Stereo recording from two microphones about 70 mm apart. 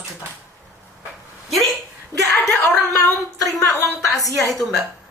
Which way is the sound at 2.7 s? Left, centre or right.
Centre.